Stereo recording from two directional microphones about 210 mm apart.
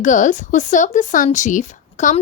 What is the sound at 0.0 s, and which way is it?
Speech, 35° left (ahead or behind).